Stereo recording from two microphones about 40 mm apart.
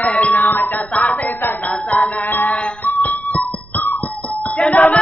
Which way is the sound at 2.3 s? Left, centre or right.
Left.